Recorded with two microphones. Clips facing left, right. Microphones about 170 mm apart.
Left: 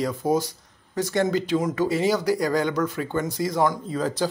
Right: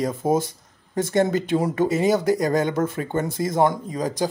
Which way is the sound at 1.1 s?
25° right (ahead or behind).